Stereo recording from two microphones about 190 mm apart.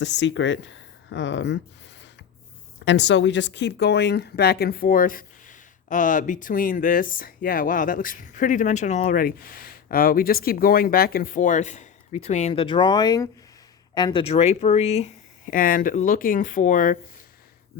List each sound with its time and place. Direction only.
0.0 s speech: 70° left (ahead or behind); by 17.0 s 45° left (ahead or behind)